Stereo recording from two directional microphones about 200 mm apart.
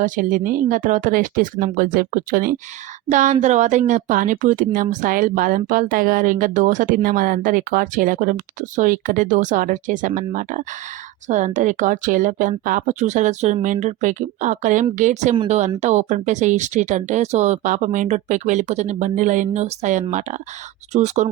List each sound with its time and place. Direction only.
0.0 s a woman's voice: 40° right (ahead or behind)